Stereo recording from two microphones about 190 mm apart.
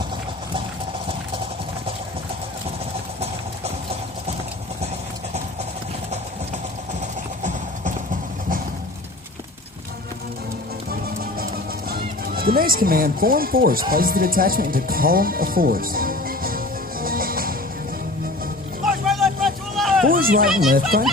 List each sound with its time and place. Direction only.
11.2 s music: 50° right (ahead or behind)
19.0 s vehicle: centre (ahead or behind)
20.1 s a sound: 50° right (ahead or behind)
20.7 s speech: 50° right (ahead or behind)